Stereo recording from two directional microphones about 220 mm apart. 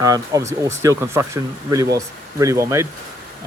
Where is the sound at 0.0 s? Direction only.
15° right (ahead or behind).